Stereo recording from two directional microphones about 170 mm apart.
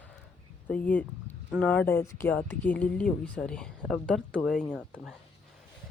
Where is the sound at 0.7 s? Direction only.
10° left (ahead or behind).